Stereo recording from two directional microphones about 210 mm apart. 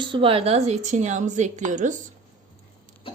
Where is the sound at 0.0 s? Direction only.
25° right (ahead or behind).